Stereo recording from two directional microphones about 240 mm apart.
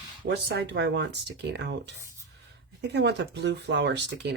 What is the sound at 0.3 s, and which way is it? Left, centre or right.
Speech, right.